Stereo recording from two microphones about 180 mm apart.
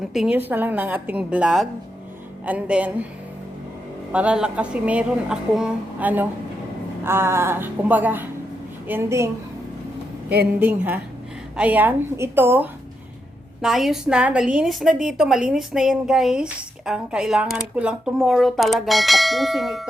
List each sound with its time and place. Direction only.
0.1 s a woman's voice: 5° right (ahead or behind)
4.1 s a woman's voice: 5° right (ahead or behind)
10.6 s a woman's voice: 10° right (ahead or behind)
13.6 s a woman's voice: centre (ahead or behind)